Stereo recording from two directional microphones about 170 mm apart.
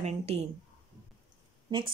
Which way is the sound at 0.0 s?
40° right (ahead or behind).